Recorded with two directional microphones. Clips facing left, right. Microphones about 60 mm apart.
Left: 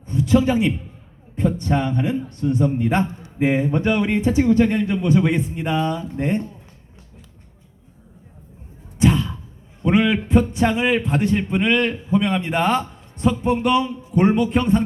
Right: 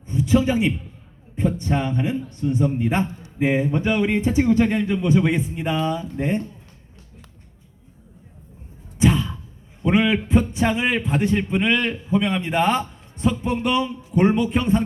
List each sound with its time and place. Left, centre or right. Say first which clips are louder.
0.1 s a man's voice: left 2 dB; centre
9.0 s a sound: left 1 dB; centre
9.8 s a man's voice: left 1 dB; centre